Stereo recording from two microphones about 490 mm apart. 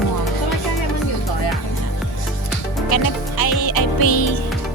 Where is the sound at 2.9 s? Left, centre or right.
Left.